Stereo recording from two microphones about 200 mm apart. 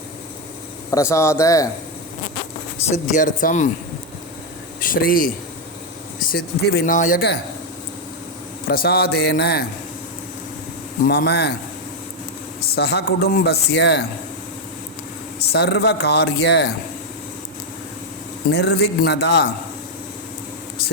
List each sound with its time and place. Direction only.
0.9 s speech: 15° left (ahead or behind)
2.8 s speech: 35° left (ahead or behind)
4.8 s speech: 45° left (ahead or behind)
8.6 s speech: 50° left (ahead or behind)
11.0 s a man's voice: 55° left (ahead or behind)
12.7 s a man's voice: 55° left (ahead or behind)
15.5 s a man's voice: 55° left (ahead or behind)
18.5 s a man's voice: 55° left (ahead or behind)